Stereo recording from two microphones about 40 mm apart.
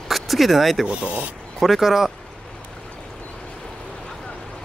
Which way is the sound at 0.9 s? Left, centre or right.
Right.